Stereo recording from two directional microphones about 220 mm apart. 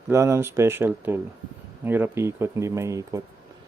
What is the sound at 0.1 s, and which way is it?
Speech, 15° right (ahead or behind).